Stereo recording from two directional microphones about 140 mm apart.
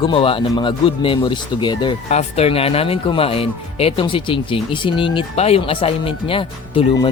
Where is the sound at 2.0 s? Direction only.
50° left (ahead or behind).